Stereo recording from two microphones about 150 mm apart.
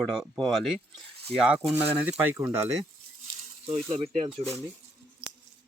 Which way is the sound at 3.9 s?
40° right (ahead or behind).